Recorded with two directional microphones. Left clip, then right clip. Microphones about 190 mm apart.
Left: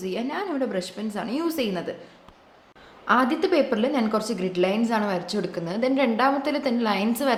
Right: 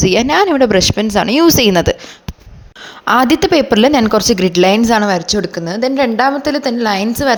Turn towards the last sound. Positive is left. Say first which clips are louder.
# right 9 dB
turn(degrees=-40)  # may be behind; listen again after turning